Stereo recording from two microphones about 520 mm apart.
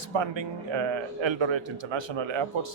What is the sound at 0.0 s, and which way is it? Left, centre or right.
Speech, right.